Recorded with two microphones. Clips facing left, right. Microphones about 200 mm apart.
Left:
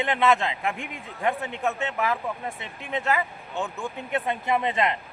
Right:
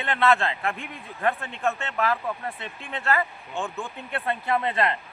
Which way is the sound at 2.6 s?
15° left (ahead or behind).